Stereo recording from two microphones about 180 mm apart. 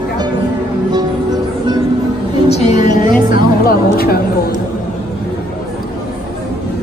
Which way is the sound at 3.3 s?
55° left (ahead or behind).